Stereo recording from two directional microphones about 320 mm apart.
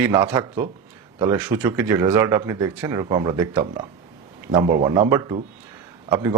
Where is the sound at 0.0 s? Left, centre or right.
Centre.